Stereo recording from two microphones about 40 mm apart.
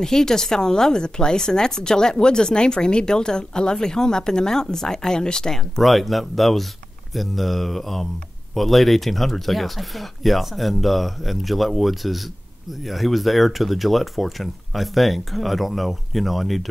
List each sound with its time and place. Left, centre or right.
0.0 s speech: centre
5.8 s speech: centre